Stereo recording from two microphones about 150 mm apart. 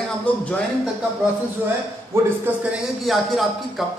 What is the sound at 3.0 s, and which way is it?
Speech, centre (ahead or behind).